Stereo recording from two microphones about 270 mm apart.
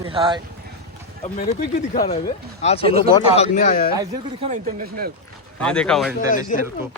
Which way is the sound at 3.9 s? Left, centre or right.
Centre.